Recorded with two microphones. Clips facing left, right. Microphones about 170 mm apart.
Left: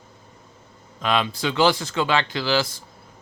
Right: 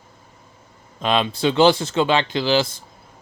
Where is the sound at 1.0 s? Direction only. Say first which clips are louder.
Right 3 dB; 25° right (ahead or behind).